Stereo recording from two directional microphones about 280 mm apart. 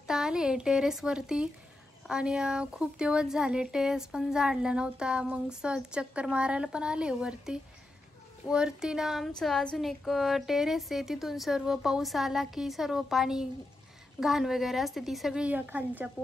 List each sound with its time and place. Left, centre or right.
0.0 s speech: centre